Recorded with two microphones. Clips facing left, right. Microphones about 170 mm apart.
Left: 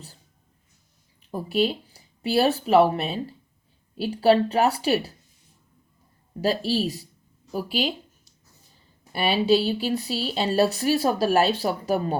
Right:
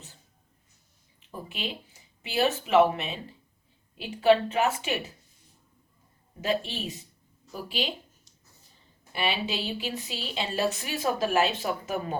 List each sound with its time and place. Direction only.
1.3 s speech: 40° left (ahead or behind)
6.4 s speech: 35° left (ahead or behind)
9.1 s speech: 35° left (ahead or behind)